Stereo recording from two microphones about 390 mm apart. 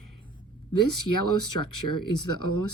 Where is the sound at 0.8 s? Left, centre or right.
Left.